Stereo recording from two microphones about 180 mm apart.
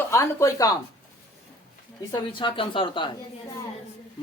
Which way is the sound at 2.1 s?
25° left (ahead or behind).